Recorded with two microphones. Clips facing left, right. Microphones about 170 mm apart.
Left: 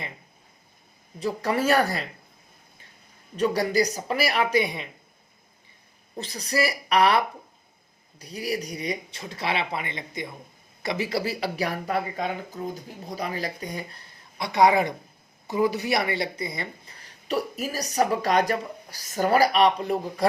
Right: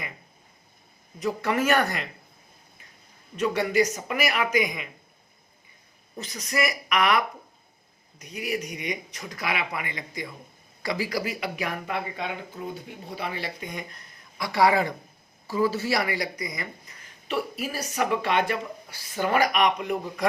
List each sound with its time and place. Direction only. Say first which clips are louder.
1.2 s speech: even; 35° left (ahead or behind)
3.3 s speech: left 1 dB; 35° left (ahead or behind)
6.1 s speech: left 2 dB; 35° left (ahead or behind)